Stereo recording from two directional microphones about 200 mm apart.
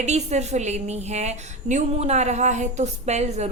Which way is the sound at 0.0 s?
35° right (ahead or behind).